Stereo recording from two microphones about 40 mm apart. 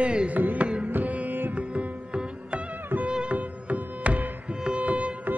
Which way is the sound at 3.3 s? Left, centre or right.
Right.